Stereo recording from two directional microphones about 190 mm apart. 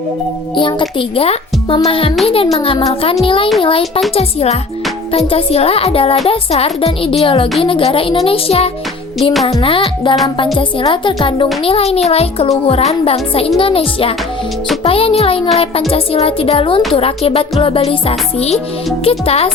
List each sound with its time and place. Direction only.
0.5 s a child's voice: 25° left (ahead or behind)